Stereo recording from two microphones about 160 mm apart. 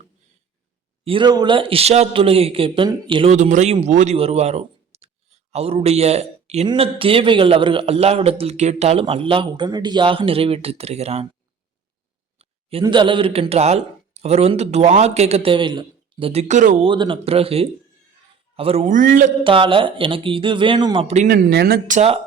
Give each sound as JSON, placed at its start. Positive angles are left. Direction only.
{"t": 1.0, "sound": "a man's voice", "side_deg": -30}
{"t": 3.3, "sound": "a man's voice", "side_deg": -45}
{"t": 12.8, "sound": "a man's voice", "side_deg": -30}
{"t": 16.8, "sound": "a man's voice", "side_deg": -30}
{"t": 18.9, "sound": "speech", "side_deg": -55}
{"t": 19.5, "sound": "a man's voice", "side_deg": -30}
{"t": 21.2, "sound": "speech", "side_deg": -75}
{"t": 21.8, "sound": "speech", "side_deg": -45}